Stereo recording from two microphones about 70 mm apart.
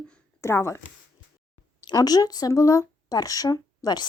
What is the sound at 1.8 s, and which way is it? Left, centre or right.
Speech, left.